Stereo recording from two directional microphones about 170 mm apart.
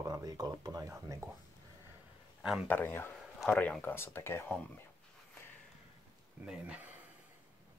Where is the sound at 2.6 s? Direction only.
10° left (ahead or behind).